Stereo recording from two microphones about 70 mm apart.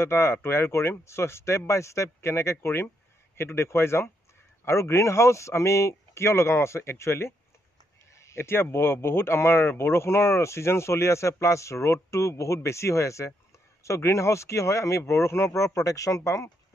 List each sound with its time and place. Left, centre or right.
0.0 s speech: left